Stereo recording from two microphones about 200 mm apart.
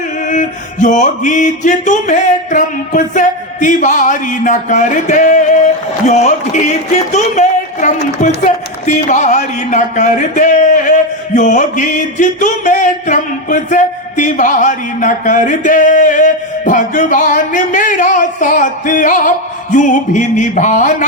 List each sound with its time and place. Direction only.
0.3 s speech: 40° left (ahead or behind)